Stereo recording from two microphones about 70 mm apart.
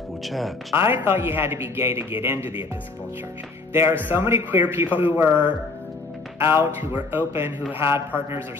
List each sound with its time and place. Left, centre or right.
0.2 s speech: centre
0.7 s speech: right
3.7 s a man's voice: right
6.4 s speech: right